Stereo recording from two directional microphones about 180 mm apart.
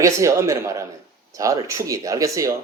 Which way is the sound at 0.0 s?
15° right (ahead or behind).